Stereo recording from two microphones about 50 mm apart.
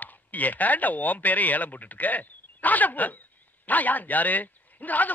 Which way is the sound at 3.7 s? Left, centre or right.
Left.